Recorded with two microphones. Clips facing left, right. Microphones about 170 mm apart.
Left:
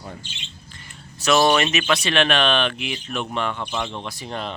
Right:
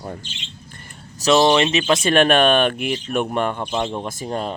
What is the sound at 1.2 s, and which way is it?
Speech, 25° right (ahead or behind).